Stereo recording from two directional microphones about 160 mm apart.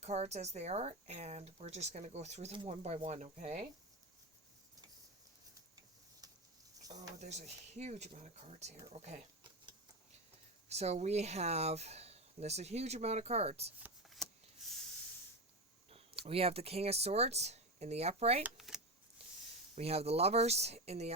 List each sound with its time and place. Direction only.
0.0 s speech: 45° right (ahead or behind)
6.2 s a sound: 25° right (ahead or behind)
7.2 s speech: 45° right (ahead or behind)
10.7 s speech: 45° right (ahead or behind)
13.7 s a sound: 10° right (ahead or behind)
15.9 s speech: 35° right (ahead or behind)
18.4 s speech: 5° right (ahead or behind)
19.7 s speech: 40° right (ahead or behind)